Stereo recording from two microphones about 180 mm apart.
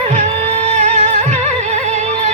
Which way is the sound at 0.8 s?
40° right (ahead or behind).